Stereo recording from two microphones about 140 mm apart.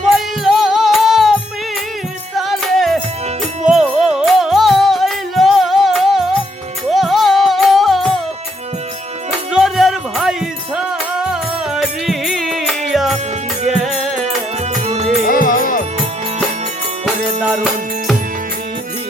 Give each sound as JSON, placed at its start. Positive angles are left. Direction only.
{"t": 0.0, "sound": "music", "side_deg": 0}
{"t": 9.5, "sound": "music", "side_deg": -5}
{"t": 14.7, "sound": "music", "side_deg": -55}
{"t": 15.3, "sound": "music", "side_deg": 85}
{"t": 17.4, "sound": "music", "side_deg": -5}